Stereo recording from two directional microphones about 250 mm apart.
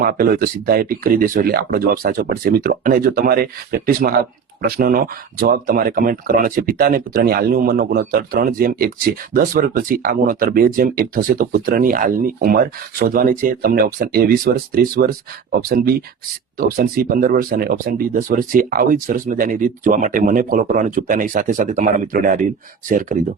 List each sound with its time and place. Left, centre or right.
0.0 s speech: right